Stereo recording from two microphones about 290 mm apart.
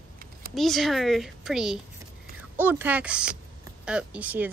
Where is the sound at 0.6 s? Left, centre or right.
Centre.